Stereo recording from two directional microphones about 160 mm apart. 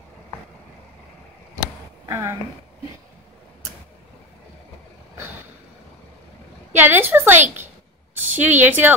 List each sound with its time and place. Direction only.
2.0 s speech: 15° right (ahead or behind)
6.7 s a woman's voice: 15° right (ahead or behind)